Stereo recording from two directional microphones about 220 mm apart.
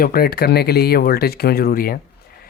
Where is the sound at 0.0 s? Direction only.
40° left (ahead or behind).